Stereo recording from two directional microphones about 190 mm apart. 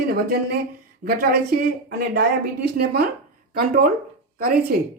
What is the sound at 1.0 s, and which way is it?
Speech, 45° right (ahead or behind).